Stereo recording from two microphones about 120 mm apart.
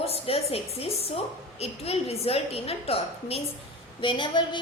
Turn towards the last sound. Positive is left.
turn(degrees=40)  # may be behind; listen again after turning